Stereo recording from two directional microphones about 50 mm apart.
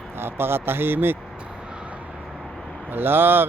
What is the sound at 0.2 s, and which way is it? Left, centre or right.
Speech, right.